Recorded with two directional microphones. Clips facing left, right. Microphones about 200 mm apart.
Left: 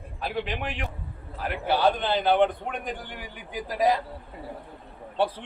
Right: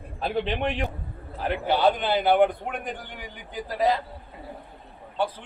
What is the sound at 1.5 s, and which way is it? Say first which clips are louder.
A man's voice: right 2 dB; 20° right (ahead or behind).